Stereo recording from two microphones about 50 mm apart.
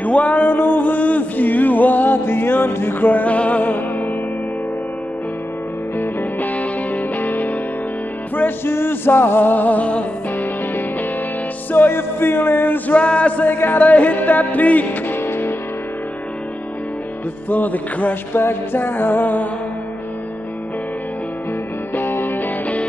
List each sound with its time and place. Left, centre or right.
0.0 s a sound: left
3.3 s music: left
5.9 s music: left
10.3 s music: left
13.5 s music: left
17.5 s music: left
18.3 s music: left
21.9 s music: left